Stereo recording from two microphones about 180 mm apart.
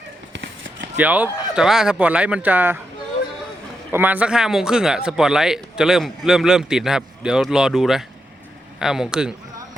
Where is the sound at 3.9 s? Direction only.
10° right (ahead or behind).